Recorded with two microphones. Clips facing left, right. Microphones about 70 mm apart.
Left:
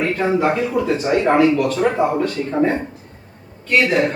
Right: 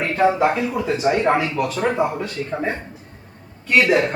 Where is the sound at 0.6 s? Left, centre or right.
Centre.